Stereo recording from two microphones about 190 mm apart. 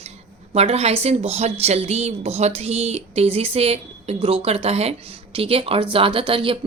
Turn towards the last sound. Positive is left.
turn(degrees=-25)  # may be behind; listen again after turning